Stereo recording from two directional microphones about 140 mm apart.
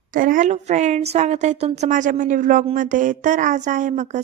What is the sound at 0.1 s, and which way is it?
A woman's voice, 75° right (ahead or behind).